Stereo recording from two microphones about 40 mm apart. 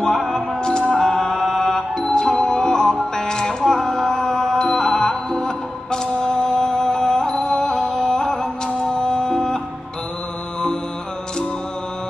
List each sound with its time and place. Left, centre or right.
0.0 s music: centre